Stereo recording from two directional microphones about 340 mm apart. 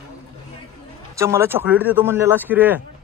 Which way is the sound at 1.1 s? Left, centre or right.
Centre.